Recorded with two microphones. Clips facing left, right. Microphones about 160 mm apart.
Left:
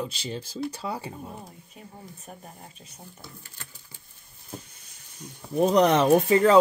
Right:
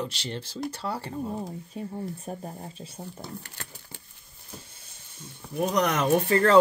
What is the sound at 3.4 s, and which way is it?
Sewing machine, 70° right (ahead or behind).